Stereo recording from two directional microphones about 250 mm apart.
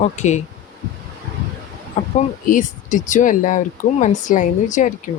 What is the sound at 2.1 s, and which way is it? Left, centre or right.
Speech, left.